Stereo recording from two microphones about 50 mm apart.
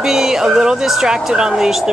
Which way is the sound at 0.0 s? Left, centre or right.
Centre.